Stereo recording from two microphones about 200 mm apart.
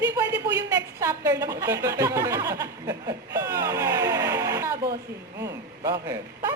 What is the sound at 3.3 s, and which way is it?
Vehicle, 15° right (ahead or behind).